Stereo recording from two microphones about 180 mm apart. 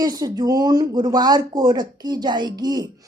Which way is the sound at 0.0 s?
20° right (ahead or behind).